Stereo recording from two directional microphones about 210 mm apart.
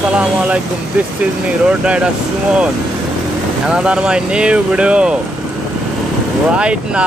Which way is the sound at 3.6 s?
5° right (ahead or behind).